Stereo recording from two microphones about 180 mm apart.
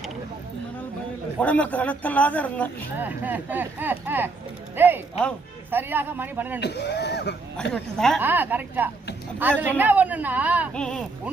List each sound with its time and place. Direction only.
1.4 s speech: 10° left (ahead or behind)
3.0 s speech: 10° right (ahead or behind)
6.6 s speech: 70° left (ahead or behind)
7.5 s speech: 5° left (ahead or behind)
8.2 s speech: 10° right (ahead or behind)
10.8 s speech: 5° left (ahead or behind)